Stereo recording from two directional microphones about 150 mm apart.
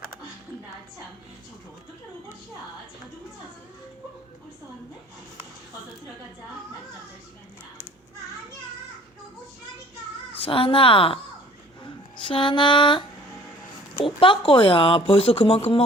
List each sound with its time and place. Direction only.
10.3 s speech: 40° left (ahead or behind)
12.2 s speech: 35° left (ahead or behind)